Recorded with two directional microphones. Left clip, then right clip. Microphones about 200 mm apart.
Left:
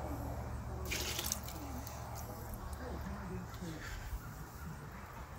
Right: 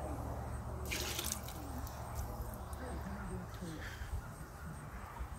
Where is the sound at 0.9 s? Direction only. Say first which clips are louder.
Left 1 dB; 5° right (ahead or behind).